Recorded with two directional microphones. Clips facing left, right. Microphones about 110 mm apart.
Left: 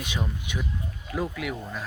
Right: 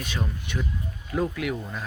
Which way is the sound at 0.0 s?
15° left (ahead or behind).